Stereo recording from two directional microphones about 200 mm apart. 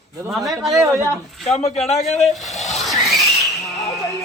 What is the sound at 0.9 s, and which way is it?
Speech, 15° right (ahead or behind).